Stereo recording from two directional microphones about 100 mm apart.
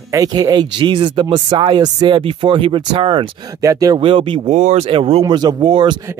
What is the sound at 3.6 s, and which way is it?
Speech, 35° right (ahead or behind).